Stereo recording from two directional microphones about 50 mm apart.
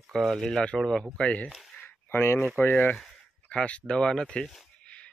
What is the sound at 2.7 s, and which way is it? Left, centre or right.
Speech, left.